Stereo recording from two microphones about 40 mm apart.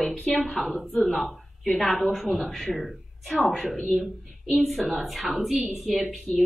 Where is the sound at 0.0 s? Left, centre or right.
Centre.